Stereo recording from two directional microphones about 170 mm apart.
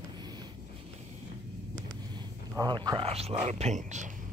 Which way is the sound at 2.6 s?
25° right (ahead or behind).